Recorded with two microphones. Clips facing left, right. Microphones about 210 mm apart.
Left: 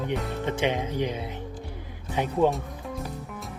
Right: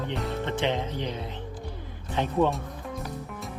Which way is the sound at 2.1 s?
10° left (ahead or behind).